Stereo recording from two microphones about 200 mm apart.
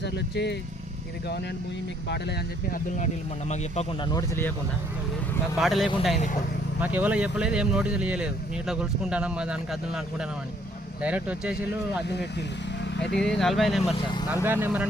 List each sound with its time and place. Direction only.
0.0 s speech: 60° left (ahead or behind)
2.0 s speech: 55° left (ahead or behind)
3.5 s speech: 35° left (ahead or behind)
4.0 s speech: 15° left (ahead or behind)
5.5 s speech: centre (ahead or behind)
12.0 s speech: 55° left (ahead or behind)
13.1 s speech: 5° left (ahead or behind)